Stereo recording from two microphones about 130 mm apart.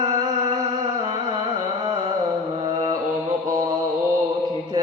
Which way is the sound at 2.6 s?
30° right (ahead or behind).